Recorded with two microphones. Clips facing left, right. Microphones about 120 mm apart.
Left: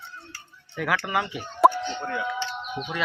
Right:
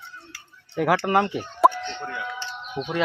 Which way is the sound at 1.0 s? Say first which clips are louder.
Right 6 dB; 50° right (ahead or behind).